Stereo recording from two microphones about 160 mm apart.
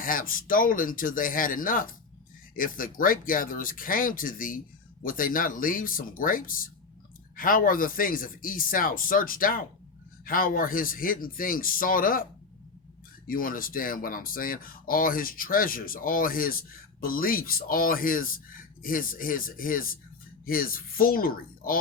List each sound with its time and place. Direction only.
0.0 s speech: 60° left (ahead or behind)
13.2 s speech: 60° left (ahead or behind)